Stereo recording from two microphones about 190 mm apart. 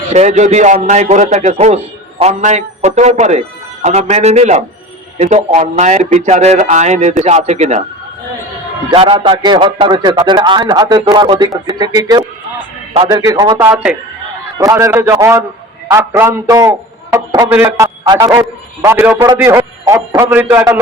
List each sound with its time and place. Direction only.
0.1 s a man's voice: 40° right (ahead or behind)
8.9 s a man's voice: 30° right (ahead or behind)
13.6 s a man's voice: 10° right (ahead or behind)